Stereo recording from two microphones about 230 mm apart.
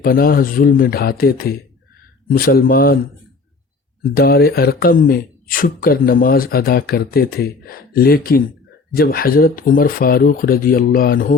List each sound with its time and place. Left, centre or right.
0.0 s speech: left
4.1 s speech: left